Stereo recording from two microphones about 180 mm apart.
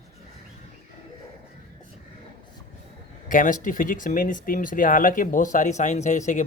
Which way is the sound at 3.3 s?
45° left (ahead or behind).